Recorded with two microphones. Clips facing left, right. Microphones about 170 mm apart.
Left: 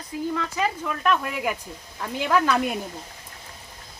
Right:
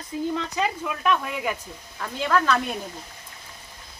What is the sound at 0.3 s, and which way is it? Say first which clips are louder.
Speech: even; 15° right (ahead or behind).